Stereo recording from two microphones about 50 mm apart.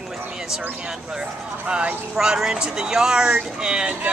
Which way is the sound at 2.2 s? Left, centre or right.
Centre.